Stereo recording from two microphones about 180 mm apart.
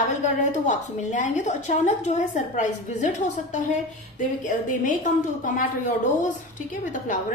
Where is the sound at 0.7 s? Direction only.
40° left (ahead or behind).